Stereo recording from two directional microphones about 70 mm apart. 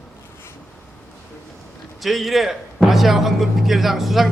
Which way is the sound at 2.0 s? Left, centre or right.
Centre.